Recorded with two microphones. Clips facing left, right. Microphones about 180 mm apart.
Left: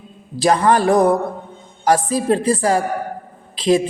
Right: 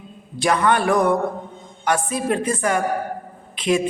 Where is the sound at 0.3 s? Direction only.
35° left (ahead or behind).